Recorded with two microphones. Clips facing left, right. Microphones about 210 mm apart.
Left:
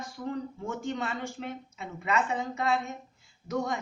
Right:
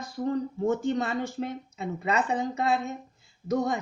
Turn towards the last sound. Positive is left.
turn(degrees=-35)  # may be behind; listen again after turning